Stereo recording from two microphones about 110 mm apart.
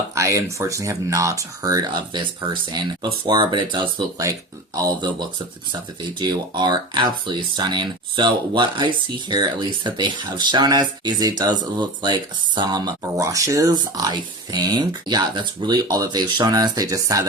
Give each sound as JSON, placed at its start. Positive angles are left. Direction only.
{"t": 0.1, "sound": "speech", "side_deg": -25}
{"t": 4.7, "sound": "speech", "side_deg": -35}